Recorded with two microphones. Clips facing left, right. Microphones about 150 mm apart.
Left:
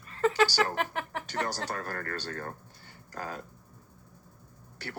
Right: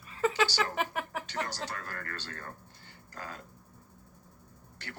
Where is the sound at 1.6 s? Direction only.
40° left (ahead or behind).